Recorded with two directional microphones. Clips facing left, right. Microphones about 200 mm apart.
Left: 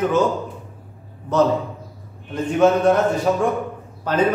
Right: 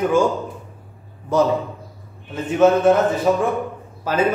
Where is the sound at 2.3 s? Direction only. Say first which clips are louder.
Right 1 dB; 5° right (ahead or behind).